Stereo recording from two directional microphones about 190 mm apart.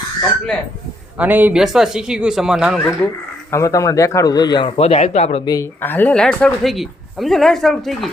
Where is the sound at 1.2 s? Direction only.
10° right (ahead or behind).